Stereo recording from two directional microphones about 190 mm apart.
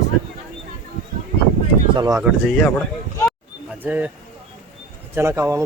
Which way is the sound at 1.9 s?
20° right (ahead or behind).